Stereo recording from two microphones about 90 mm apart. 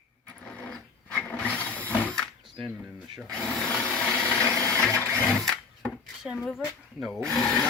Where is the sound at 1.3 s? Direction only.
15° left (ahead or behind).